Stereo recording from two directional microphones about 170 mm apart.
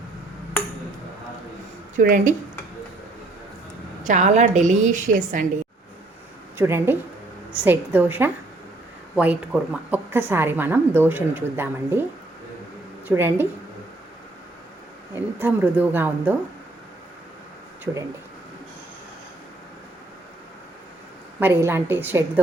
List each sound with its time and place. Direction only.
2.0 s a woman's voice: 50° right (ahead or behind)
4.0 s a woman's voice: 45° right (ahead or behind)
6.6 s a woman's voice: 15° right (ahead or behind)
13.1 s a woman's voice: 15° right (ahead or behind)
15.1 s a woman's voice: 10° right (ahead or behind)
21.3 s a woman's voice: 15° right (ahead or behind)